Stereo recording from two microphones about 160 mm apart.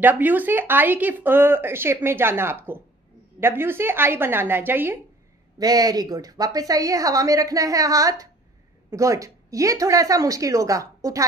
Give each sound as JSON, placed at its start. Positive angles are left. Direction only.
{"t": 0.0, "sound": "speech", "side_deg": -10}
{"t": 5.6, "sound": "a woman's voice", "side_deg": -25}